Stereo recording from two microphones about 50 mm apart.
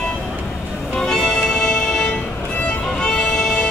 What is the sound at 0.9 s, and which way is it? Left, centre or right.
Music, centre.